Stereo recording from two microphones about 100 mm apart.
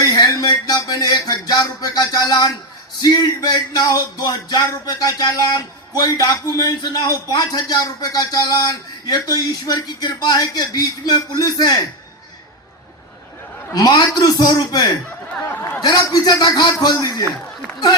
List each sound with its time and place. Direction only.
0.0 s music: 40° left (ahead or behind)
3.0 s a man's voice: 40° left (ahead or behind)
13.7 s speech: 45° left (ahead or behind)
15.4 s speech: 25° left (ahead or behind)
15.8 s a man's voice: 40° left (ahead or behind)